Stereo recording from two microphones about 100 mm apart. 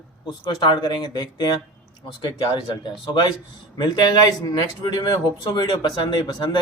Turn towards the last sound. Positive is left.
turn(degrees=50)  # may be behind; listen again after turning